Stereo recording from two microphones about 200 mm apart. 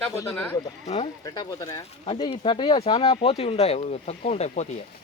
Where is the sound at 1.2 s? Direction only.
20° left (ahead or behind).